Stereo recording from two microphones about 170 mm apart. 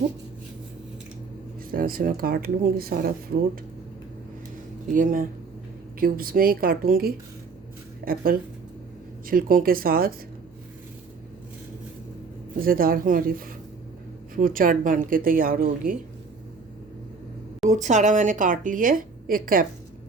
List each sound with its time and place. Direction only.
1.7 s a woman's voice: 55° right (ahead or behind)
4.9 s a woman's voice: 50° right (ahead or behind)
12.5 s a woman's voice: 60° right (ahead or behind)
17.7 s a woman's voice: 45° right (ahead or behind)